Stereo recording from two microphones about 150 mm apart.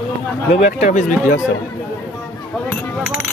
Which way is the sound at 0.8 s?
55° left (ahead or behind).